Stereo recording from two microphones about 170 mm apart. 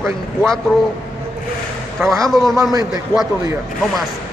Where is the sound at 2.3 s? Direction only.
Centre (ahead or behind).